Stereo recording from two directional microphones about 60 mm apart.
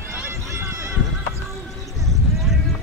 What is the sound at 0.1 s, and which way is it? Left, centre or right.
Run, right.